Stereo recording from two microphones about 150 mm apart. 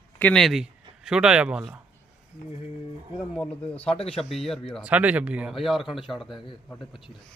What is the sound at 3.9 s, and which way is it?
Speech, 40° left (ahead or behind).